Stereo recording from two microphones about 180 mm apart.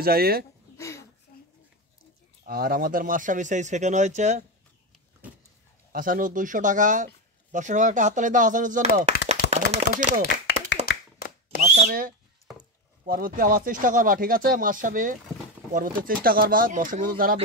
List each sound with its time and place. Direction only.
0.0 s speech: 55° right (ahead or behind)
0.7 s a sound: 15° left (ahead or behind)
1.3 s a sound: 55° left (ahead or behind)
2.4 s speech: 55° right (ahead or behind); by 4.5 s 40° right (ahead or behind)
5.2 s vehicle: 10° right (ahead or behind)
5.9 s speech: 50° right (ahead or behind)
9.5 s chopping: 40° right (ahead or behind)
10.9 s clapping: 55° left (ahead or behind)
11.6 s a sound: 40° right (ahead or behind)
13.0 s speech: 50° right (ahead or behind)